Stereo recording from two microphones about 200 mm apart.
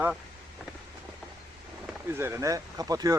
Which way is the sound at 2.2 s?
15° right (ahead or behind).